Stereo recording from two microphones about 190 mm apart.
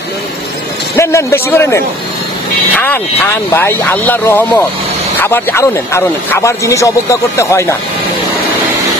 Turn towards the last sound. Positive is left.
turn(degrees=15)  # may be behind; listen again after turning